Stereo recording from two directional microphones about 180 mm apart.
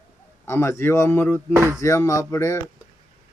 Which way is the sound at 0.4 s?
15° left (ahead or behind).